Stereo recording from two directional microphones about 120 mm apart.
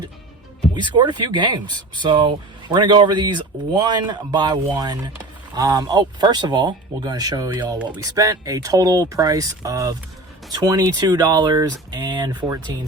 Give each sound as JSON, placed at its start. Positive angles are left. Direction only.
{"t": 0.7, "sound": "speech", "side_deg": -40}